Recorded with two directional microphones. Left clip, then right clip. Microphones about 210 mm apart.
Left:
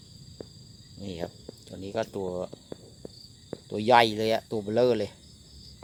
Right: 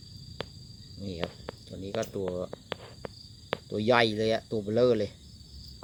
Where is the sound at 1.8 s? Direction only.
15° left (ahead or behind).